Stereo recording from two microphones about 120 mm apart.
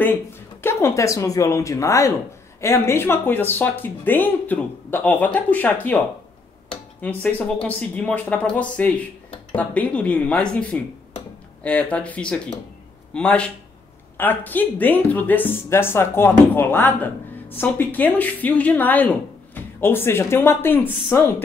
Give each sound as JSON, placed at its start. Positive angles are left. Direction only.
{"t": 0.6, "sound": "speech", "side_deg": 20}